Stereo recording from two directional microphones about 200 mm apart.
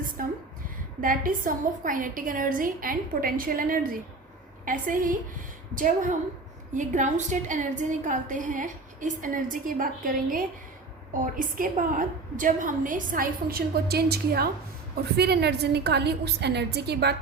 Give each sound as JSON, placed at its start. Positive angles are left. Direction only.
{"t": 0.2, "sound": "a woman's voice", "side_deg": -45}